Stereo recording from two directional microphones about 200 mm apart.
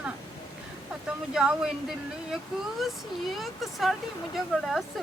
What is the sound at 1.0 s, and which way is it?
Speech, 5° right (ahead or behind).